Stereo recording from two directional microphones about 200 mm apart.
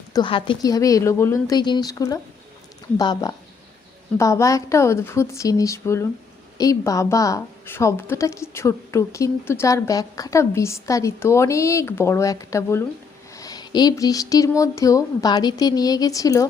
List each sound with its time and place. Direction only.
0.1 s a woman's voice: 25° left (ahead or behind)